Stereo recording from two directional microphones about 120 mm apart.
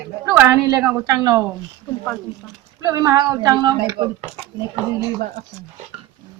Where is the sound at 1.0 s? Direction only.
30° right (ahead or behind).